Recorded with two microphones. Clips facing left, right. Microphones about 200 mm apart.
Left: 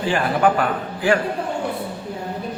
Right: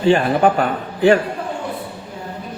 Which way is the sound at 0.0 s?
25° right (ahead or behind).